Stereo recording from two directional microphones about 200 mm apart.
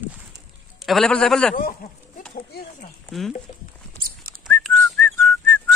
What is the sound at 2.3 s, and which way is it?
Speech, 50° left (ahead or behind).